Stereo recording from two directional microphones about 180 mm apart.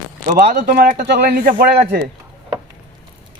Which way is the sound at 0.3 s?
60° right (ahead or behind).